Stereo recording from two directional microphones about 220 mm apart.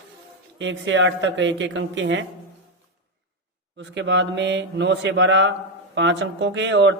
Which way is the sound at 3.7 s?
55° right (ahead or behind).